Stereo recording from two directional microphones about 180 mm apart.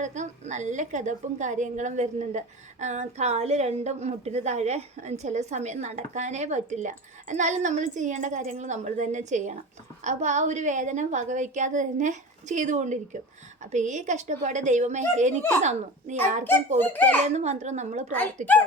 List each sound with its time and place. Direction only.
0.0 s a woman's voice: 40° right (ahead or behind)
16.8 s speech: 10° left (ahead or behind)
17.2 s a woman's voice: 40° right (ahead or behind)